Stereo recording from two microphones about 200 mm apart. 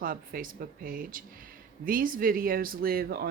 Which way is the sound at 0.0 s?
45° right (ahead or behind).